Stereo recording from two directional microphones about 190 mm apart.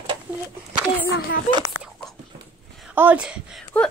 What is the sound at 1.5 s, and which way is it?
Speech, 35° left (ahead or behind).